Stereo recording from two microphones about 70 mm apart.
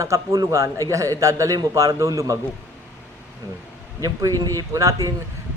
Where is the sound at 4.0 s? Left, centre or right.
Right.